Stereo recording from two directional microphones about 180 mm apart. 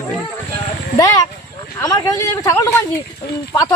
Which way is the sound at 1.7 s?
15° left (ahead or behind).